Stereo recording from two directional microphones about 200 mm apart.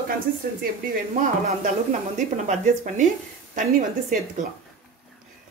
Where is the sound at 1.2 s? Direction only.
40° right (ahead or behind).